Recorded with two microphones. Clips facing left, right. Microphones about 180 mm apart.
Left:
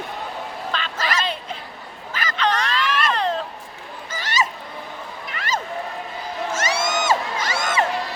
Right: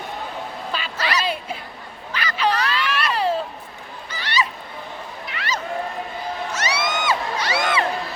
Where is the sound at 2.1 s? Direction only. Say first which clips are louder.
Right 1 dB; 45° left (ahead or behind).